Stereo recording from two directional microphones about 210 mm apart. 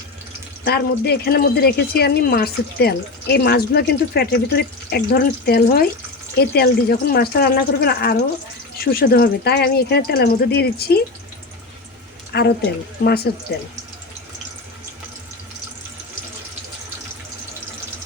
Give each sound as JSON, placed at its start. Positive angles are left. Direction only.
{"t": 0.6, "sound": "speech", "side_deg": 50}
{"t": 12.3, "sound": "speech", "side_deg": 50}